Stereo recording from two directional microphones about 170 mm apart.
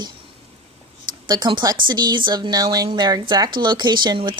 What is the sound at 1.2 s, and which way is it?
Speech, 25° right (ahead or behind).